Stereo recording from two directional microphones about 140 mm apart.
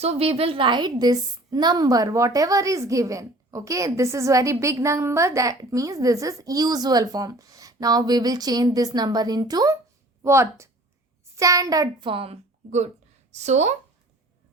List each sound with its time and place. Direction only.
0.0 s a woman's voice: 45° right (ahead or behind)